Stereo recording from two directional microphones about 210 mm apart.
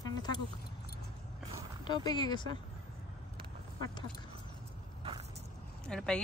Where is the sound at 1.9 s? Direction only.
20° left (ahead or behind).